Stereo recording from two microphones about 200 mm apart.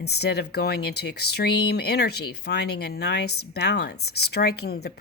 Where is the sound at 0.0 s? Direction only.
55° left (ahead or behind).